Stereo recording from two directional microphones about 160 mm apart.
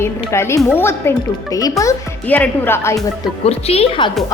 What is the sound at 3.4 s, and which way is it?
Speech, 40° left (ahead or behind).